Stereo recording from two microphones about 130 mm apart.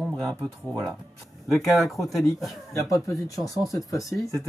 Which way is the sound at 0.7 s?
Centre (ahead or behind).